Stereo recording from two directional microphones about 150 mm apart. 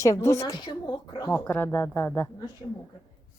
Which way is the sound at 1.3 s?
10° left (ahead or behind).